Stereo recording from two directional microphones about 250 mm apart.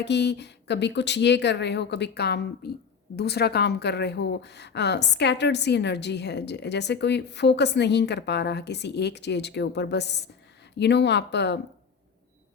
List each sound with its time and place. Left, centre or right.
0.0 s a woman's voice: left